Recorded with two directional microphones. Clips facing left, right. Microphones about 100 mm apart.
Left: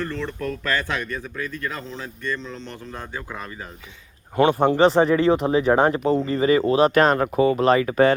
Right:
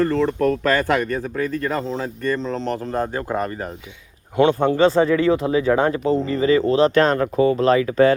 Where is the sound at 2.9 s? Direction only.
50° right (ahead or behind).